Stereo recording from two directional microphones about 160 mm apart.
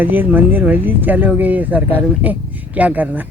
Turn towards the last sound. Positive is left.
turn(degrees=-10)  # may be behind; listen again after turning